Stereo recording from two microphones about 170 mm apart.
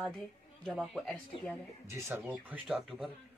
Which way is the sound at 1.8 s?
15° right (ahead or behind).